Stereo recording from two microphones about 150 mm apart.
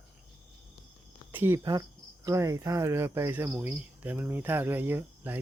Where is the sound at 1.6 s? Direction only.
25° right (ahead or behind).